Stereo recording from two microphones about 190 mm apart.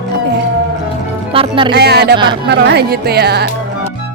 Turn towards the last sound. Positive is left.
turn(degrees=-60)  # may be behind; listen again after turning